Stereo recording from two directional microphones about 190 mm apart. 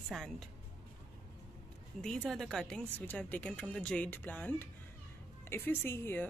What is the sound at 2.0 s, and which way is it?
Speech, centre (ahead or behind).